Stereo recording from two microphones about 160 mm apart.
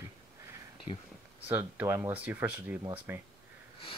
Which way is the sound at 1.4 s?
10° right (ahead or behind).